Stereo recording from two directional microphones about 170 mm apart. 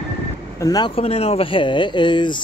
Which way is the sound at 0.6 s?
20° left (ahead or behind).